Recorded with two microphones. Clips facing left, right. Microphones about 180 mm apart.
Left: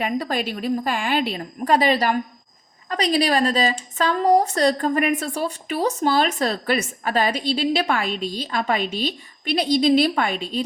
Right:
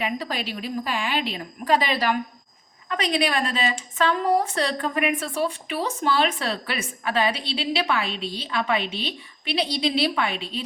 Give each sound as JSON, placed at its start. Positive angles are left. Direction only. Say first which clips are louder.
{"t": 0.0, "sound": "a woman's voice", "louder": "left 4 dB", "side_deg": 45}